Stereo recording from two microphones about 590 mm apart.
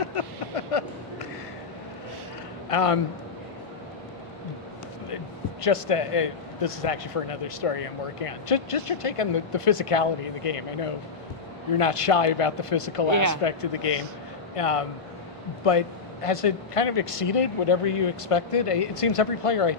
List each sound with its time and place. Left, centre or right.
0.0 s a sound: left
2.6 s a man's voice: left
5.6 s speech: left
16.2 s speech: left